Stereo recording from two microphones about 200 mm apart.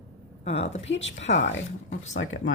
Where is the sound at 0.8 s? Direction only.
65° left (ahead or behind).